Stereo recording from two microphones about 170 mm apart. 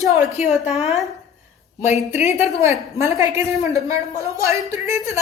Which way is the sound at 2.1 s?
40° left (ahead or behind).